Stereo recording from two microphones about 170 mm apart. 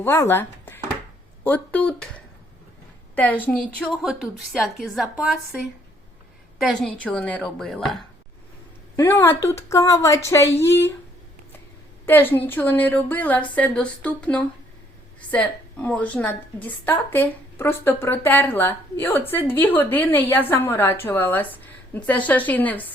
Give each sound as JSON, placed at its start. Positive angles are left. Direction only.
{"t": 0.0, "sound": "a woman's voice", "side_deg": 15}
{"t": 6.6, "sound": "a woman's voice", "side_deg": 5}
{"t": 9.0, "sound": "a woman's voice", "side_deg": 15}
{"t": 12.0, "sound": "a woman's voice", "side_deg": 10}